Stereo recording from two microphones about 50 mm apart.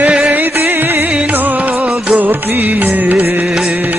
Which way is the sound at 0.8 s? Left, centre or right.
Right.